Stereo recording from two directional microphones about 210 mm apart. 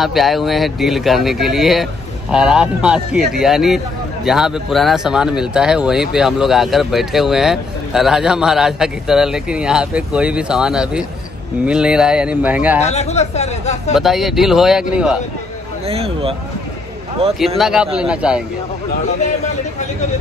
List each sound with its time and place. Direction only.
0.0 s a man's voice: centre (ahead or behind)
12.8 s speech: 30° left (ahead or behind)
13.9 s a man's voice: centre (ahead or behind)
15.8 s speech: 30° right (ahead or behind)
17.6 s a man's voice: 5° right (ahead or behind)